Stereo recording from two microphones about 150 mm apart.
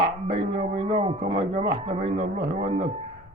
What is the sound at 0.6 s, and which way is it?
Speech, 40° right (ahead or behind).